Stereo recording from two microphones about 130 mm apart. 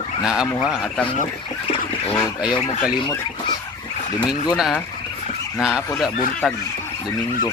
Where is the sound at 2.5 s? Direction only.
30° left (ahead or behind).